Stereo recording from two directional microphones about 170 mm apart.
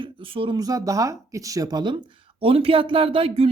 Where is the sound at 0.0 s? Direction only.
30° right (ahead or behind).